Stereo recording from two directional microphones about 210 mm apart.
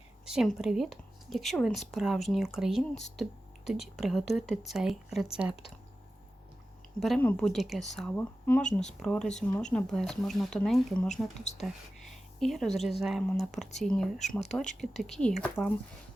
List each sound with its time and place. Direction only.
0.3 s a woman's voice: 5° right (ahead or behind)
7.0 s a woman's voice: 5° left (ahead or behind)
11.5 s speech: 30° left (ahead or behind)
12.1 s a woman's voice: centre (ahead or behind)